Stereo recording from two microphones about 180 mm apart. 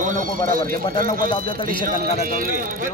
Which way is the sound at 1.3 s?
25° left (ahead or behind).